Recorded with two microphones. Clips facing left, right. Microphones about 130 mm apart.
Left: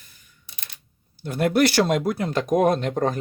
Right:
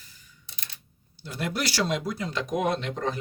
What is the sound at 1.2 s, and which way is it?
Speech, 55° left (ahead or behind).